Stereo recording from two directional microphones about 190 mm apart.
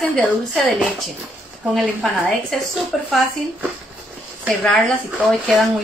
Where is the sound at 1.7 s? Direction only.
Centre (ahead or behind).